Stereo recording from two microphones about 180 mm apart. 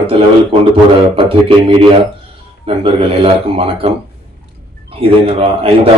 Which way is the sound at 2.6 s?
30° right (ahead or behind).